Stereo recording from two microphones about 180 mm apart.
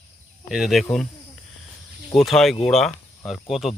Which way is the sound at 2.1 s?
Centre (ahead or behind).